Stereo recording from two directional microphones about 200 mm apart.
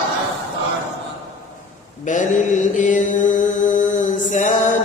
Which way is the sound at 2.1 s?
40° left (ahead or behind).